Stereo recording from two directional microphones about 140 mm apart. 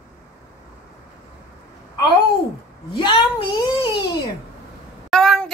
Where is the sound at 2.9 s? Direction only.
35° left (ahead or behind).